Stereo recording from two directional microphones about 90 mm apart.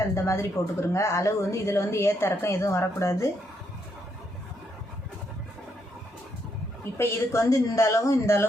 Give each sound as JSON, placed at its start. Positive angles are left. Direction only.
{"t": 0.1, "sound": "speech", "side_deg": 30}
{"t": 6.9, "sound": "a woman's voice", "side_deg": 30}